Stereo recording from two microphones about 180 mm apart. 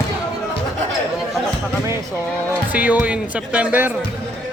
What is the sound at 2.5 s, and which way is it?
Speech, 10° right (ahead or behind).